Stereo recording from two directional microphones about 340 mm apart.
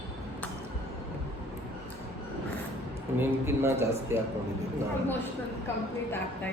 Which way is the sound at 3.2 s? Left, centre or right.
Centre.